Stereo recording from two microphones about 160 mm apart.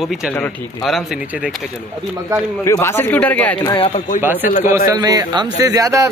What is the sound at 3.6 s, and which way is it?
Speech, 25° left (ahead or behind).